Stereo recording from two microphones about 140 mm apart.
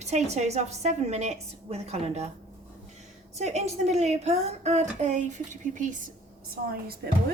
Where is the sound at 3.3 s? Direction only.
55° right (ahead or behind).